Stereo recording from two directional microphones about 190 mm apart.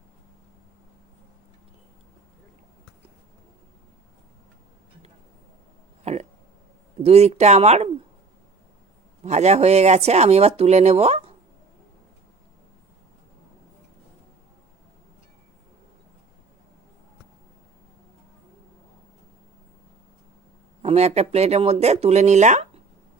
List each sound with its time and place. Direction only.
6.0 s a sound: 35° right (ahead or behind)
7.0 s speech: 35° right (ahead or behind)
9.2 s speech: 35° right (ahead or behind)
20.8 s speech: 35° right (ahead or behind)